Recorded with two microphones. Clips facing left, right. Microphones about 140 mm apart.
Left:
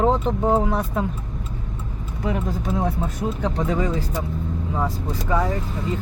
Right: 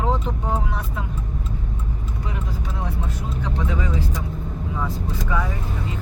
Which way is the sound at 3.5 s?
45° left (ahead or behind).